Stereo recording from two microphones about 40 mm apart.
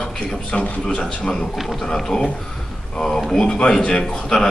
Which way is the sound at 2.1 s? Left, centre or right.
Centre.